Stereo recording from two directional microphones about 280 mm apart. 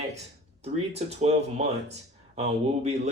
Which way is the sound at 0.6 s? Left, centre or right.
Right.